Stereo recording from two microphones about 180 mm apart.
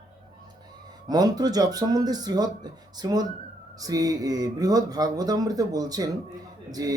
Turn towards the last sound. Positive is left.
turn(degrees=-20)  # may be behind; listen again after turning